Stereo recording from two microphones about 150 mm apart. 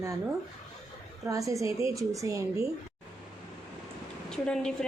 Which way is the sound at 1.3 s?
20° right (ahead or behind).